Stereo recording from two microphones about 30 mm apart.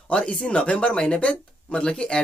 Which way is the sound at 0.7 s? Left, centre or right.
Left.